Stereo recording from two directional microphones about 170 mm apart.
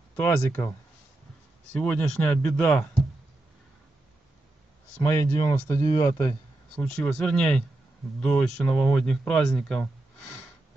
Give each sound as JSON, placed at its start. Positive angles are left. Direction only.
{"t": 0.1, "sound": "speech", "side_deg": 15}
{"t": 1.8, "sound": "speech", "side_deg": 5}
{"t": 5.0, "sound": "speech", "side_deg": 20}